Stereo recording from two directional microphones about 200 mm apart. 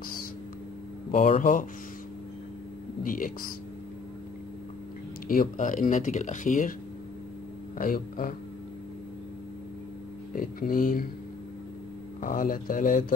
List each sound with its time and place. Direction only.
1.1 s speech: 40° left (ahead or behind)
3.0 s speech: 45° left (ahead or behind)
5.3 s speech: 45° left (ahead or behind)
7.7 s speech: 45° left (ahead or behind)
10.3 s speech: 45° left (ahead or behind)
12.2 s speech: 45° left (ahead or behind)